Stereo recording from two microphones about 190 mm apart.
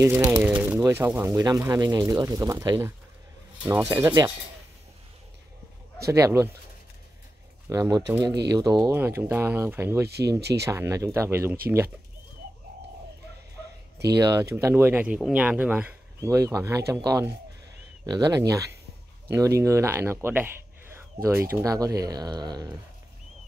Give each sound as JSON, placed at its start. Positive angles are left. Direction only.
{"t": 0.4, "sound": "speech", "side_deg": -10}
{"t": 6.0, "sound": "speech", "side_deg": -15}
{"t": 7.7, "sound": "speech", "side_deg": -15}
{"t": 10.0, "sound": "speech", "side_deg": -60}
{"t": 10.6, "sound": "speech", "side_deg": -15}
{"t": 14.0, "sound": "speech", "side_deg": -20}